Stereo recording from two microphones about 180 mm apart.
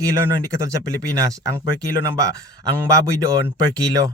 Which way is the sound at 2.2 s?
20° right (ahead or behind).